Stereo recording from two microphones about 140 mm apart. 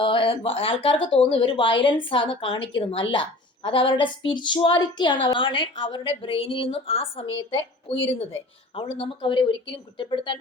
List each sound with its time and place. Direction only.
0.0 s speech: 40° left (ahead or behind)